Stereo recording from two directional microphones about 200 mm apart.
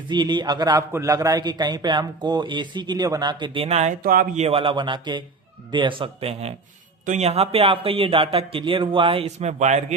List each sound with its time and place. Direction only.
0.1 s a man's voice: 20° right (ahead or behind); by 4.4 s 45° right (ahead or behind)
4.4 s a man's voice: 25° right (ahead or behind)